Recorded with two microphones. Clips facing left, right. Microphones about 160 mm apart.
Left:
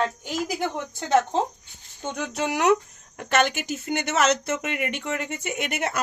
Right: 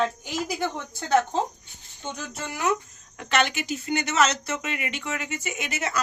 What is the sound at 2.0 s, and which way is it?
Speech, 70° left (ahead or behind).